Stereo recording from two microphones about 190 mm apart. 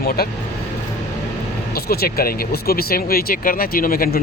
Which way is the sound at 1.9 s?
55° left (ahead or behind).